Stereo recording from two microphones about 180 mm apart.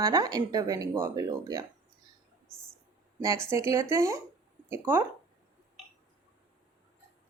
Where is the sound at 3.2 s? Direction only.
15° right (ahead or behind).